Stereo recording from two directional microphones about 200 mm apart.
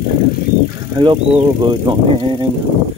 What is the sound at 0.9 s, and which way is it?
Speech, 25° right (ahead or behind).